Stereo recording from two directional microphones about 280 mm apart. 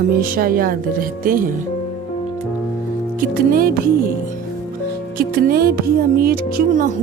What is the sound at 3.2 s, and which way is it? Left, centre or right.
Speech, right.